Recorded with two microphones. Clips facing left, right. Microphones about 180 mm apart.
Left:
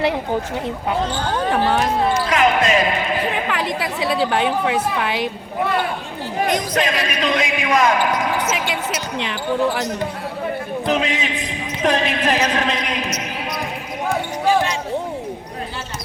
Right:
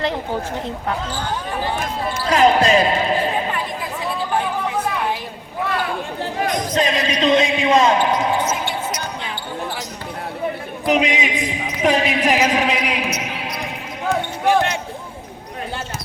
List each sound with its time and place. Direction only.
1.5 s speech: 80° left
2.3 s speech: 35° right (ahead or behind)
3.5 s a sound: 90° left
6.9 s speech: 25° right (ahead or behind)
8.4 s speech: 85° left
10.8 s a man's voice: 15° right (ahead or behind)
14.4 s basketball bounce: 60° right (ahead or behind)